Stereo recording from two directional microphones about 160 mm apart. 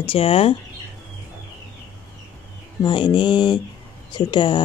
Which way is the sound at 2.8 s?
30° left (ahead or behind).